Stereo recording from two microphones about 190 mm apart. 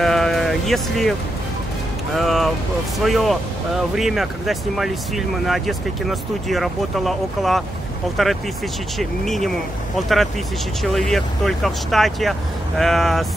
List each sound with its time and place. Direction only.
0.0 s sheep: centre (ahead or behind)
2.1 s speech: centre (ahead or behind)